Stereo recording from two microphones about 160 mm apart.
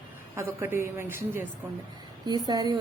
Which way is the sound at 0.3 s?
15° right (ahead or behind).